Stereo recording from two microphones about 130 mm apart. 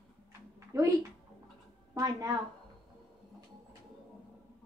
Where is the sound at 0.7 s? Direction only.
25° right (ahead or behind).